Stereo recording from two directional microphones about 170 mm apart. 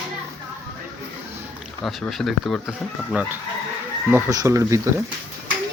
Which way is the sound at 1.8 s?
Centre (ahead or behind).